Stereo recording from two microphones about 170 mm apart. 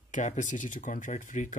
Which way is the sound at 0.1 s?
45° left (ahead or behind).